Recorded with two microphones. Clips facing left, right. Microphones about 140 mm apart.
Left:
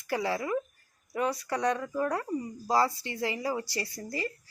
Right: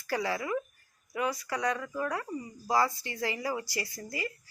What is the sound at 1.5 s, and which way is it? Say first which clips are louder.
Speech: left 4 dB; 5° right (ahead or behind).